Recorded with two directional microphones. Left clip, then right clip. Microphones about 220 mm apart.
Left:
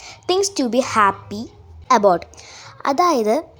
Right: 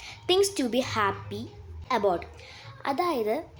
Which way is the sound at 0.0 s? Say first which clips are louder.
Left 4 dB; 20° left (ahead or behind).